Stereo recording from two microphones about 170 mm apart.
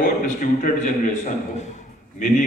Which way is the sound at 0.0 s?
50° left (ahead or behind).